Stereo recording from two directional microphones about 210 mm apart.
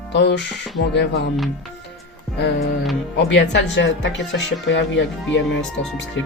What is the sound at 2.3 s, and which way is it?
Speech, 55° left (ahead or behind).